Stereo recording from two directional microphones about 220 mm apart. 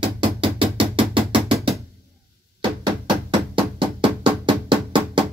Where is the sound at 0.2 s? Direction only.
25° right (ahead or behind).